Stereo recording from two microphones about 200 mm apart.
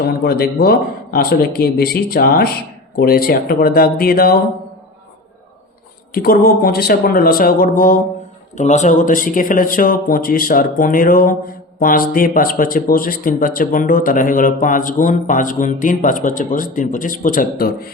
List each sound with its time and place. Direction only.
0.3 s speech: 50° left (ahead or behind)
6.1 s speech: 50° left (ahead or behind)